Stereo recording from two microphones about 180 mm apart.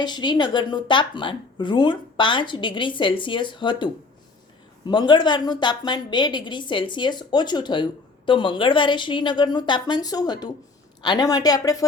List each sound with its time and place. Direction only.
0.0 s speech: 25° left (ahead or behind)